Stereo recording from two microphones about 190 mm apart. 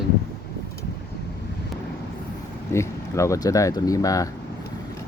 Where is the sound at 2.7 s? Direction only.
15° left (ahead or behind).